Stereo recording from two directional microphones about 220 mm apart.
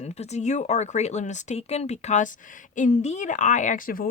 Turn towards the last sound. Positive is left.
turn(degrees=40)  # may be behind; listen again after turning